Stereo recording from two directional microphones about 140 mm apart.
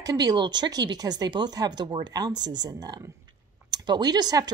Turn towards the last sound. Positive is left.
turn(degrees=-30)  # may be behind; listen again after turning